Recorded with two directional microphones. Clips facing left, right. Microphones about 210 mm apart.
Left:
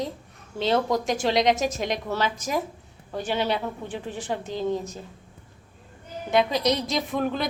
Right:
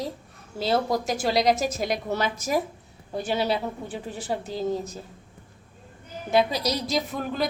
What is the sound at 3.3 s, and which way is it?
Speech, 35° right (ahead or behind).